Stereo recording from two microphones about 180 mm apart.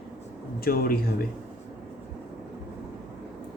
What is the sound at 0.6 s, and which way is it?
Speech, 55° left (ahead or behind).